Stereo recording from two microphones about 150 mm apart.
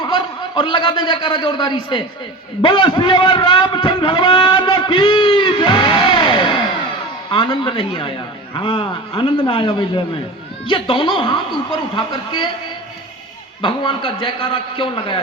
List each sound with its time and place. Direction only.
0.5 s a man's voice: 35° left (ahead or behind)
2.6 s a sound: 30° left (ahead or behind)
7.3 s a man's voice: 35° left (ahead or behind)
13.6 s a man's voice: 35° left (ahead or behind)